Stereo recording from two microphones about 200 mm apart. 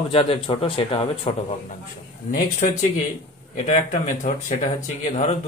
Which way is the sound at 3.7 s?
35° left (ahead or behind).